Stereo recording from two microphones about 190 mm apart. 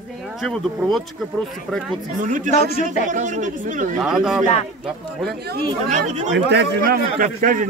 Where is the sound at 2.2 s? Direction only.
45° right (ahead or behind).